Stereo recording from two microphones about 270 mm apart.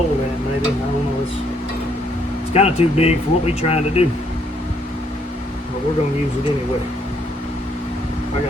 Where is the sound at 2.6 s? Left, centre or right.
Left.